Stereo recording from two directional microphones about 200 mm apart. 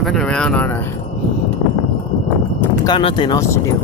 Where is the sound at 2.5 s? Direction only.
20° left (ahead or behind).